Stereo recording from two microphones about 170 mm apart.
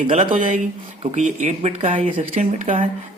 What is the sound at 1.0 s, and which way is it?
Speech, 40° right (ahead or behind).